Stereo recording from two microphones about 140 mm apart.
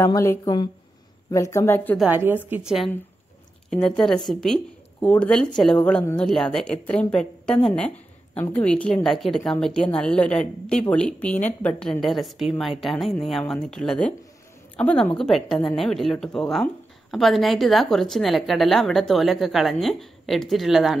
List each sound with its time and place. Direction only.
0.0 s speech: 20° left (ahead or behind)
2.0 s a woman's voice: 15° right (ahead or behind)